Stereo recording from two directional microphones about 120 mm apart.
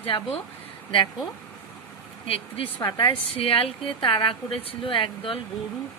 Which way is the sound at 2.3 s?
50° left (ahead or behind).